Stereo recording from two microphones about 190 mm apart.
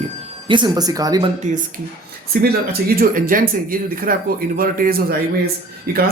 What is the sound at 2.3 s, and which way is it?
Speech, 55° right (ahead or behind).